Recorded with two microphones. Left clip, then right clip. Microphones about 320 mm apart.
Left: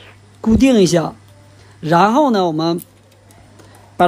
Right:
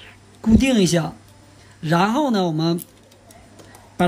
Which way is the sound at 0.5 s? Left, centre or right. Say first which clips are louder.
Left 5 dB; centre.